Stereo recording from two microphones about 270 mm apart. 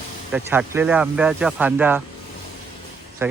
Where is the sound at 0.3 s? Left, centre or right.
Centre.